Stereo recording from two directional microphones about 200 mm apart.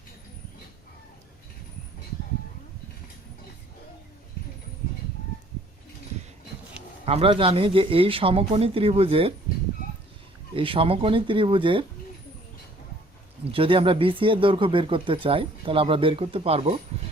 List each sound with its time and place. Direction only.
7.0 s speech: 30° right (ahead or behind)
10.5 s speech: 25° right (ahead or behind)
13.5 s speech: 25° right (ahead or behind)